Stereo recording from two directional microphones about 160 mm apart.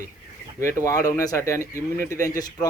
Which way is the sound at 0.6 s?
20° left (ahead or behind).